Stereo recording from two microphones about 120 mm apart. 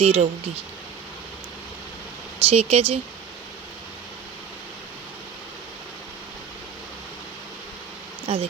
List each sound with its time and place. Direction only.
0.0 s speech: 55° right (ahead or behind)
2.5 s speech: 60° right (ahead or behind)
8.3 s speech: 50° right (ahead or behind)